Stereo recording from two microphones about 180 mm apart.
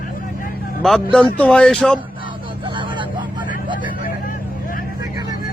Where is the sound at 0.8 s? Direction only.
Centre (ahead or behind).